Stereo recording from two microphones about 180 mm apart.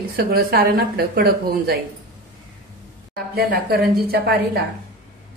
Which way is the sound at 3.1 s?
60° right (ahead or behind).